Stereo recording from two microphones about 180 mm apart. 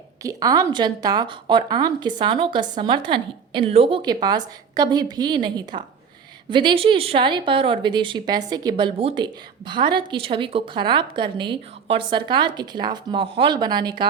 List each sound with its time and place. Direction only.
0.2 s speech: 20° right (ahead or behind)